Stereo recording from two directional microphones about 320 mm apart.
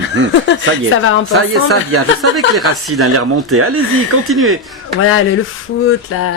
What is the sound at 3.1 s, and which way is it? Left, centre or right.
Speech, right.